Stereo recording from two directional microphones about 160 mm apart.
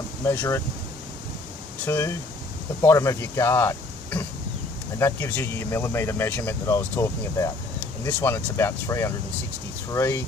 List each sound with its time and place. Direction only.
0.3 s speech: 15° left (ahead or behind)
1.9 s speech: 20° left (ahead or behind)